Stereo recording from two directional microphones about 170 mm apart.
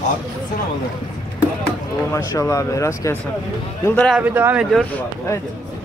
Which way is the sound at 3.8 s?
5° left (ahead or behind).